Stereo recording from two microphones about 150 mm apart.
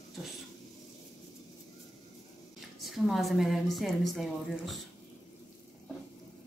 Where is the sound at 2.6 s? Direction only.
Centre (ahead or behind).